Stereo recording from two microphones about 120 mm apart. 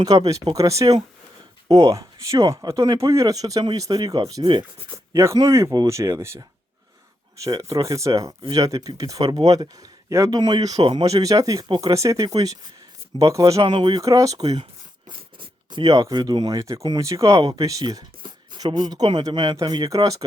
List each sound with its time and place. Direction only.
0.5 s speech: 30° right (ahead or behind)
4.4 s speech: 50° right (ahead or behind)
5.1 s speech: 25° right (ahead or behind)
7.4 s speech: 25° right (ahead or behind)